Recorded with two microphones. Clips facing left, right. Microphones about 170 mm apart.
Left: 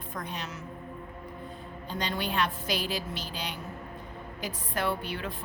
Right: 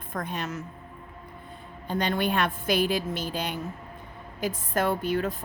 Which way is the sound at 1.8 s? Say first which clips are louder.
Right 6 dB; 55° right (ahead or behind).